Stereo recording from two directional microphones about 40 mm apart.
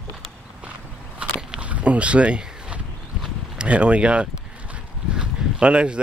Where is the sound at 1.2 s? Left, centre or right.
Right.